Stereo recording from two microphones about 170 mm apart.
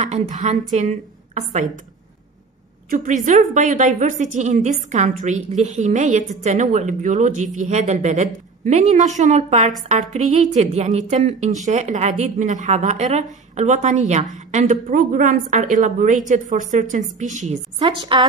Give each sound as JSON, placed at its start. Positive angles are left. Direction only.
{"t": 0.0, "sound": "a woman's voice", "side_deg": -40}
{"t": 2.9, "sound": "a woman's voice", "side_deg": -50}
{"t": 17.7, "sound": "a woman's voice", "side_deg": -30}